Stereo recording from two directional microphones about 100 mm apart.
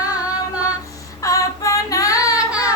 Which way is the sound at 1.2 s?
35° left (ahead or behind).